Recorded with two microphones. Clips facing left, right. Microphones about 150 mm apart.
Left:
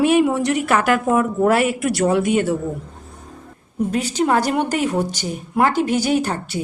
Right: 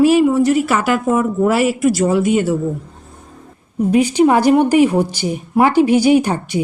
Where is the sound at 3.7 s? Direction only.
10° right (ahead or behind).